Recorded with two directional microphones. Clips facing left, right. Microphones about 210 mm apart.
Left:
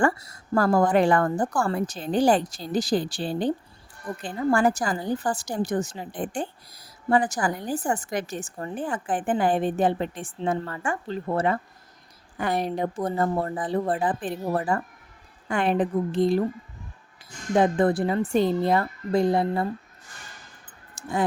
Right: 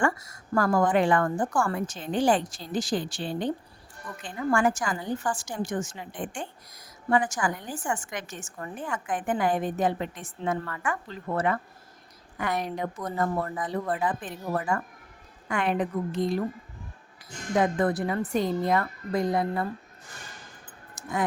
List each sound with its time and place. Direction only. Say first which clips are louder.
0.0 s a woman's voice: left 4 dB; 35° left (ahead or behind)
17.5 s a woman's voice: left 4 dB; 30° left (ahead or behind)
20.9 s a sound: left 3 dB; 30° left (ahead or behind)